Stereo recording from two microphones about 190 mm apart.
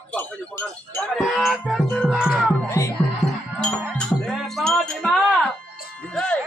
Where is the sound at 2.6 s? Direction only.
15° left (ahead or behind).